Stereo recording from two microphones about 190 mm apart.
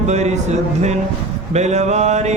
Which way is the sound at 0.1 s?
35° right (ahead or behind).